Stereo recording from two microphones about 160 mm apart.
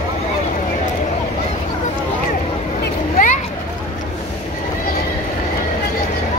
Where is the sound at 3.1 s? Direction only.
55° left (ahead or behind).